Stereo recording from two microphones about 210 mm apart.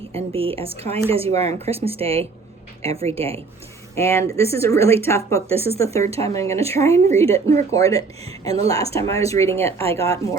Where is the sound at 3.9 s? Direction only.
15° left (ahead or behind).